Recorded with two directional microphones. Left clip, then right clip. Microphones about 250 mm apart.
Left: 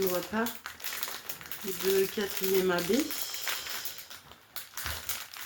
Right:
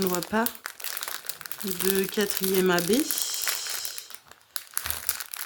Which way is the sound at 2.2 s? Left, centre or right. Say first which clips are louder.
Right 6 dB; right.